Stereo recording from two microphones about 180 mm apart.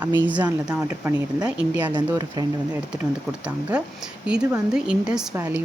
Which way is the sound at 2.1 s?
25° right (ahead or behind).